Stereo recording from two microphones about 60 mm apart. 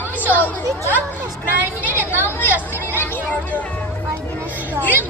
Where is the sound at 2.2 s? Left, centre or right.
Left.